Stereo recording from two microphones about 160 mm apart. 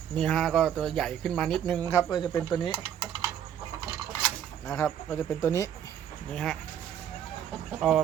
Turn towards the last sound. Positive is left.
turn(degrees=-5)  # may be behind; listen again after turning